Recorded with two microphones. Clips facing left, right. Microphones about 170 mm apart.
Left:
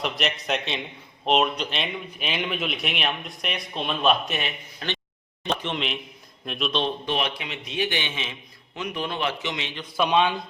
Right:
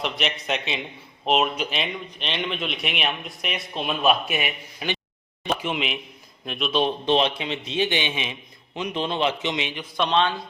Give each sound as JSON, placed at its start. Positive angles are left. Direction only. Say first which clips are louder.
{"t": 0.0, "sound": "a man's voice", "louder": "even", "side_deg": 0}
{"t": 6.8, "sound": "a man's voice", "louder": "right 5 dB", "side_deg": -25}
{"t": 10.0, "sound": "a man's voice", "louder": "left 1 dB", "side_deg": 10}